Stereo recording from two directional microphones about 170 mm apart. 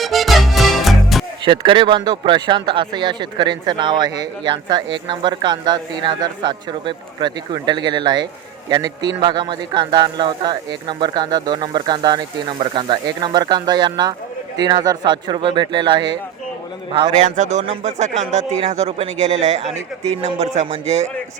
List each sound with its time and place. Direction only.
0.0 s music: centre (ahead or behind)
1.5 s a man's voice: 30° right (ahead or behind)
17.1 s speech: 45° right (ahead or behind)